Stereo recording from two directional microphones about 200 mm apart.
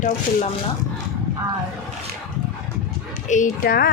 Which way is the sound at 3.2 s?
40° left (ahead or behind).